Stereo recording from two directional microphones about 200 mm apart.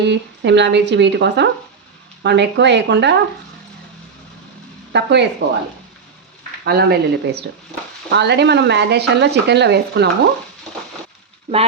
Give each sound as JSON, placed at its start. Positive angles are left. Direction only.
{"t": 0.0, "sound": "speech", "side_deg": -60}
{"t": 4.9, "sound": "speech", "side_deg": -60}
{"t": 6.7, "sound": "speech", "side_deg": -50}